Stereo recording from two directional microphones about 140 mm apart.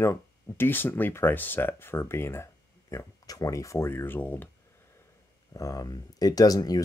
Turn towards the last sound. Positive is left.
turn(degrees=25)  # may be behind; listen again after turning